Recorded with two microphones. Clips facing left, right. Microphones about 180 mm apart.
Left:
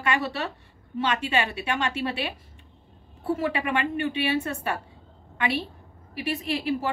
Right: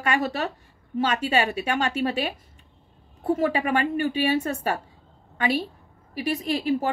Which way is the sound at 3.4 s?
40° right (ahead or behind).